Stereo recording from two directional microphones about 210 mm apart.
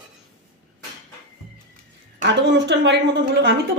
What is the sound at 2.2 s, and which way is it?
Speech, 55° right (ahead or behind).